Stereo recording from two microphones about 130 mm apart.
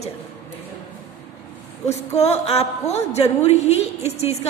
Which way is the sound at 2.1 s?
55° left (ahead or behind).